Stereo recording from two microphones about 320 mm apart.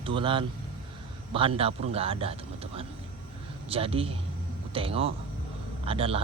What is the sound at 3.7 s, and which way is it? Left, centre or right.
A man's voice, centre.